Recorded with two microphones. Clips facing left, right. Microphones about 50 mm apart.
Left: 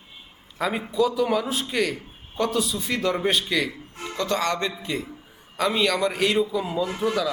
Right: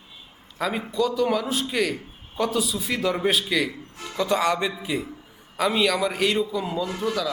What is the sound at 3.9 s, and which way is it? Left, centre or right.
Music, left.